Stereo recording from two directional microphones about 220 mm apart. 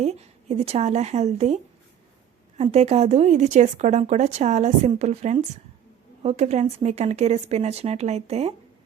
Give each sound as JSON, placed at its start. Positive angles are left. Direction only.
{"t": 0.0, "sound": "a woman's voice", "side_deg": -30}
{"t": 2.6, "sound": "speech", "side_deg": -30}